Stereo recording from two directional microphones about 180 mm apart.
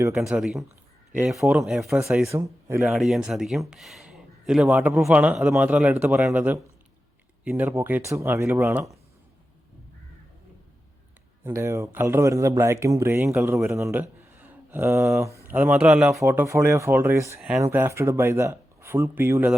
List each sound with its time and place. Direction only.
0.1 s speech: 5° right (ahead or behind)
2.3 s speech: 15° right (ahead or behind)
2.8 s speech: centre (ahead or behind)
3.7 s a sound: centre (ahead or behind)
4.8 s speech: 5° right (ahead or behind)
11.4 s speech: 15° right (ahead or behind)
16.2 s speech: 15° right (ahead or behind)